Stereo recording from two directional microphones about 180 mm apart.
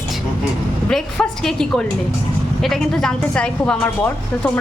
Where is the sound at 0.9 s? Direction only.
5° left (ahead or behind).